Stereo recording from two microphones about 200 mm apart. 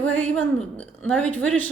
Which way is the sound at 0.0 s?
5° left (ahead or behind).